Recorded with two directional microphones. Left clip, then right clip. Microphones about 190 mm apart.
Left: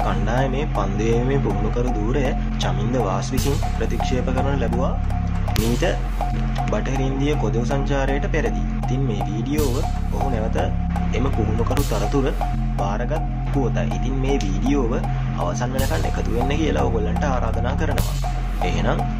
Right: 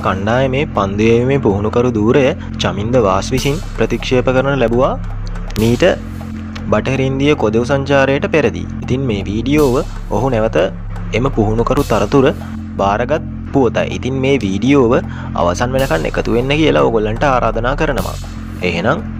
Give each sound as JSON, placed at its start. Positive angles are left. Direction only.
{"t": 0.0, "sound": "speech", "side_deg": -45}
{"t": 6.7, "sound": "speech", "side_deg": -50}